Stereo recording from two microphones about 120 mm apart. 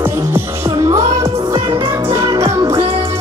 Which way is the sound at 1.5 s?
30° right (ahead or behind).